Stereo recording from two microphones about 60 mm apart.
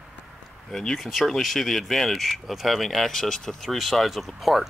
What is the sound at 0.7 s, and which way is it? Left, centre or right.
Speech, centre.